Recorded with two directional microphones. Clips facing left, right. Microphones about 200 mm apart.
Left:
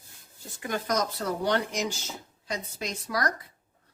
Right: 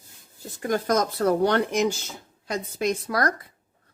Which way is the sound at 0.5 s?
45° right (ahead or behind).